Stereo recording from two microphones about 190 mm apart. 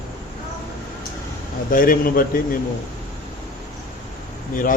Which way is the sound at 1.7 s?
45° left (ahead or behind).